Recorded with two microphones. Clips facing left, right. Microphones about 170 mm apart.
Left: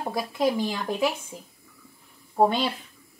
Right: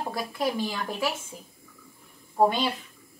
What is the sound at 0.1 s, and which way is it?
A woman's voice, 20° left (ahead or behind).